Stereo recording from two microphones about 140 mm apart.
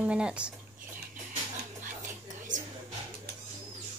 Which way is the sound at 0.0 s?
10° right (ahead or behind).